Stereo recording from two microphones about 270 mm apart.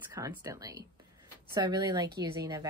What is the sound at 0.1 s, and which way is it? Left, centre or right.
Speech, centre.